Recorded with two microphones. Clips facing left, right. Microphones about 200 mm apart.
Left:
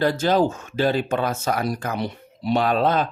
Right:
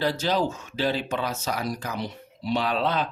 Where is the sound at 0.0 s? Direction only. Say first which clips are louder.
Left 5 dB; 50° left (ahead or behind).